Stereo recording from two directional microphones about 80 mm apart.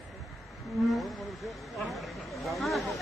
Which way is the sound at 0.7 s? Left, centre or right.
Centre.